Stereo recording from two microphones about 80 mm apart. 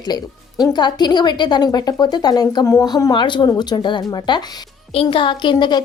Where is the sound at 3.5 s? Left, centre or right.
Left.